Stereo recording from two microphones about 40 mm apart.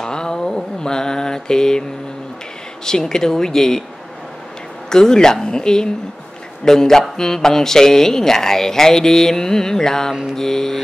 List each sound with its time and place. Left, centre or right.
0.0 s mantra: centre
2.8 s speech: centre
4.8 s speech: centre